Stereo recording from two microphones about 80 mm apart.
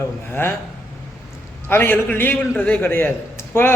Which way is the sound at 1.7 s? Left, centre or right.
Left.